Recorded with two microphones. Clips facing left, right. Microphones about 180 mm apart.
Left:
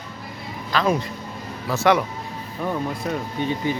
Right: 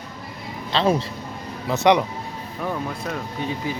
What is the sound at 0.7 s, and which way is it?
A man's voice, 30° right (ahead or behind).